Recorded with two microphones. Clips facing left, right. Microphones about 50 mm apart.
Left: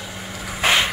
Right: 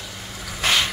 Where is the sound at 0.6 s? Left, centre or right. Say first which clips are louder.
Left 3 dB; left.